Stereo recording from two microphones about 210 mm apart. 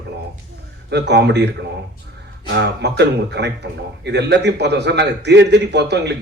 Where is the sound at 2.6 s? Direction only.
55° right (ahead or behind).